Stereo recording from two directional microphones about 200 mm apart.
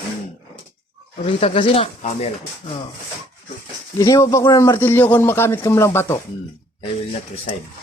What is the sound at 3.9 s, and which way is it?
A man's voice, 15° left (ahead or behind).